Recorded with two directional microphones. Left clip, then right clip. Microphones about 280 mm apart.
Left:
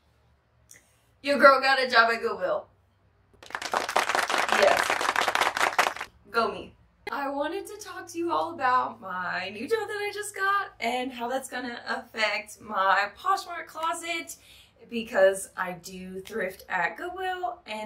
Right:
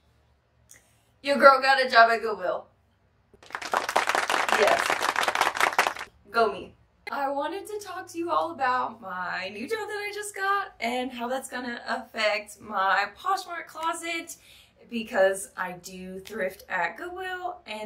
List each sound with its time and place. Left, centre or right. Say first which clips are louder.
1.2 s a woman's voice: right 1 dB; centre
3.3 s a sound: right 1 dB; centre
7.1 s a woman's voice: right 1 dB; centre